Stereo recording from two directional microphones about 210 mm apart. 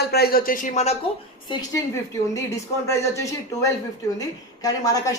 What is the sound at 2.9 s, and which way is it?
A woman's voice, 15° left (ahead or behind).